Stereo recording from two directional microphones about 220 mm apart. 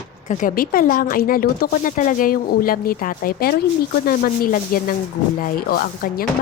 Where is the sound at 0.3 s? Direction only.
35° left (ahead or behind).